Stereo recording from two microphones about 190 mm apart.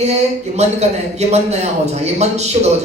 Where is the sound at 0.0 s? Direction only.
35° right (ahead or behind).